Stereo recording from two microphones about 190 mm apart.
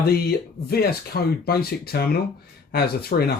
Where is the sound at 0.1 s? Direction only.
55° left (ahead or behind).